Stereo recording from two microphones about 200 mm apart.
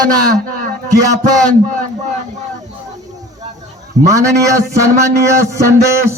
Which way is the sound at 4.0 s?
35° right (ahead or behind).